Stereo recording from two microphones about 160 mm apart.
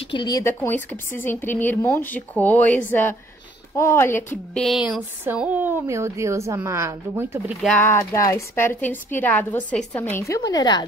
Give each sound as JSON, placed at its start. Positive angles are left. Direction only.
{"t": 0.0, "sound": "speech", "side_deg": 30}
{"t": 4.6, "sound": "speech", "side_deg": 0}
{"t": 7.6, "sound": "speech", "side_deg": 10}